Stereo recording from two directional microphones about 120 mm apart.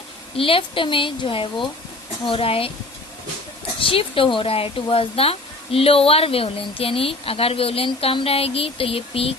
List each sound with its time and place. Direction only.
0.3 s speech: 50° left (ahead or behind)
3.8 s speech: 50° left (ahead or behind)